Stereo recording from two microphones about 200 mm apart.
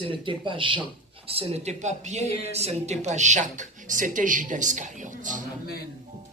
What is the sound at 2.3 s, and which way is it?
Speech, 50° left (ahead or behind).